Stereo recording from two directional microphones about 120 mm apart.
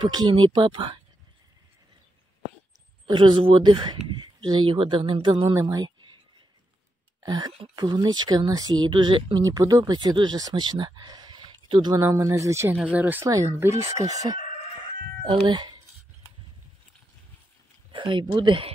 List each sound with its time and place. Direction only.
0.0 s speech: 40° right (ahead or behind)
3.1 s speech: 40° right (ahead or behind)
5.5 s speech: 30° right (ahead or behind)
7.2 s speech: 35° right (ahead or behind)
9.5 s speech: 30° right (ahead or behind)
12.0 s speech: 25° right (ahead or behind)
17.9 s speech: 45° right (ahead or behind)